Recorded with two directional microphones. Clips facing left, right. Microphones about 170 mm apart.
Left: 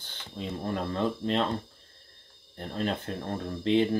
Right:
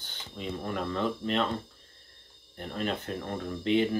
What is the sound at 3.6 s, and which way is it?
Speech, 35° left (ahead or behind).